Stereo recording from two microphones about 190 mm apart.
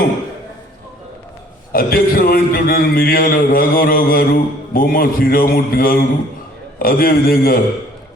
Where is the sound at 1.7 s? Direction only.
50° left (ahead or behind).